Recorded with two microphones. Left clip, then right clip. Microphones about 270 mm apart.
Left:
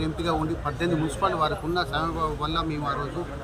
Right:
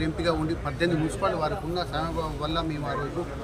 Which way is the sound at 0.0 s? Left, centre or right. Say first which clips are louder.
Right 1 dB; right.